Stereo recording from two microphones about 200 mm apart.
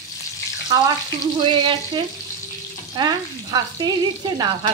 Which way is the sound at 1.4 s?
25° right (ahead or behind).